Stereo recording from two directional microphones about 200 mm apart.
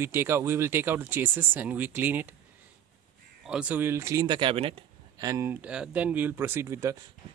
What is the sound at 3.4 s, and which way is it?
Speech, 5° right (ahead or behind).